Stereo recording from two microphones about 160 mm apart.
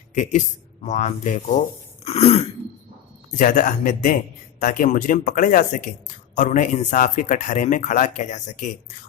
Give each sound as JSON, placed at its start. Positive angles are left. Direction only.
{"t": 0.1, "sound": "speech", "side_deg": 50}
{"t": 2.0, "sound": "cough", "side_deg": 40}
{"t": 3.3, "sound": "speech", "side_deg": 55}